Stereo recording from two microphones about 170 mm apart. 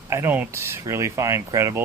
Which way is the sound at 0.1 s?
15° right (ahead or behind).